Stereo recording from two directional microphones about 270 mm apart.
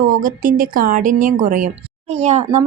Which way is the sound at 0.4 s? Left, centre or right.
Right.